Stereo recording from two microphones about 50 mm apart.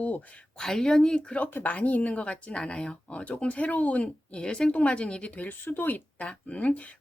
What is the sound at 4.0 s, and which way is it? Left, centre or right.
Speech, centre.